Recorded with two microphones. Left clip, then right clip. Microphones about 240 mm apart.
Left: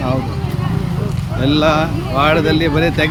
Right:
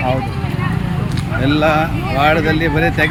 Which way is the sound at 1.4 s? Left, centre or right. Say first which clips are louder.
Even; centre.